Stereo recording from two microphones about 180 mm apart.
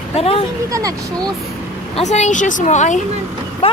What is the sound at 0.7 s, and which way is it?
Speech, 20° right (ahead or behind).